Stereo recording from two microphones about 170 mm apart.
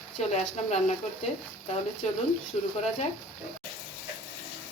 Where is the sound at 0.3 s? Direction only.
40° left (ahead or behind).